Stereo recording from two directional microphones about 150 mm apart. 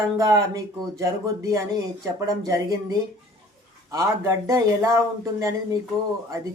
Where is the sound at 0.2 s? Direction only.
20° right (ahead or behind).